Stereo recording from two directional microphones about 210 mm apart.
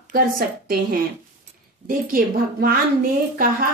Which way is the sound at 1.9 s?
40° right (ahead or behind).